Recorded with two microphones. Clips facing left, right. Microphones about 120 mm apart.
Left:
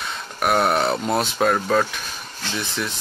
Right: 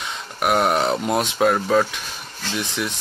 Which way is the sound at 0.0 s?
15° right (ahead or behind).